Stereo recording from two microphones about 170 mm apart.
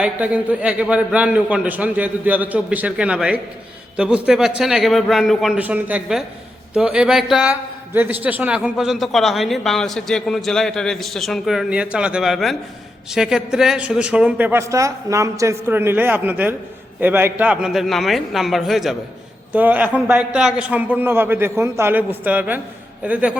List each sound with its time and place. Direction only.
0.0 s a man's voice: 10° right (ahead or behind)